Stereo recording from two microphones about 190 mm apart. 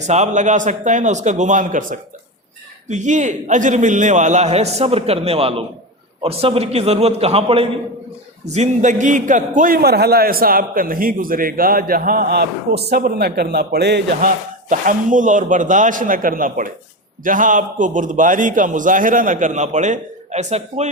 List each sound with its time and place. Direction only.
0.1 s a man's voice: 40° right (ahead or behind); by 14.3 s 60° right (ahead or behind)
14.7 s a man's voice: 45° right (ahead or behind)